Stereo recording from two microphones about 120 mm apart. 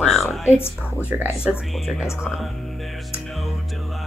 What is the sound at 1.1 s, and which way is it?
Speech, 15° right (ahead or behind).